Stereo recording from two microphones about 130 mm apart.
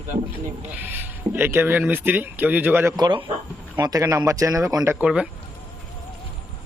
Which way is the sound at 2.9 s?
35° right (ahead or behind).